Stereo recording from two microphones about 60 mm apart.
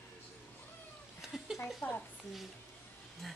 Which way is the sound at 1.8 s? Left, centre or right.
Left.